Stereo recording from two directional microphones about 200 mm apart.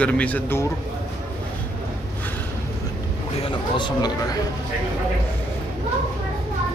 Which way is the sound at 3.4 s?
25° left (ahead or behind).